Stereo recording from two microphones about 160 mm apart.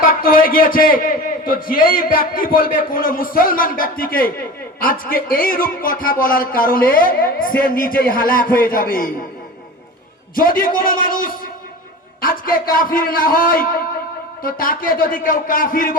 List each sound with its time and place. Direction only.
0.0 s a man's voice: 65° left (ahead or behind)
10.3 s a man's voice: 60° left (ahead or behind)